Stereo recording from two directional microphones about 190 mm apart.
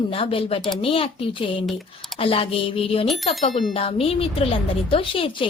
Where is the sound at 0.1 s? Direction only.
30° left (ahead or behind).